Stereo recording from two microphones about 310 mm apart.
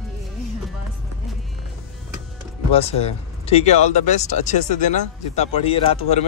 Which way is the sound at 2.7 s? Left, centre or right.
Centre.